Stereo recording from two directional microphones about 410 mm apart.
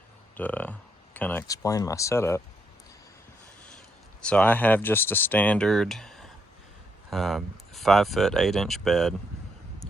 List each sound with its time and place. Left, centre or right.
0.3 s speech: centre
4.2 s speech: centre